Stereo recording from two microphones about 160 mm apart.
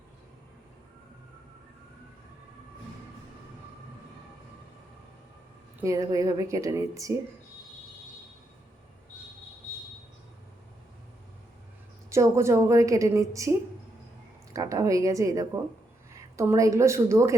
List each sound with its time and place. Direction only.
5.8 s a woman's voice: 20° right (ahead or behind)
12.0 s a woman's voice: 20° right (ahead or behind)